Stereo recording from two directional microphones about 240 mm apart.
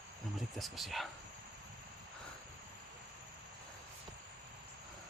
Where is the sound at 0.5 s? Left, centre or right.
Centre.